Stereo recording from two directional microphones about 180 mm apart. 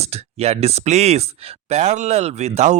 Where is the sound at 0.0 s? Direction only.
35° right (ahead or behind).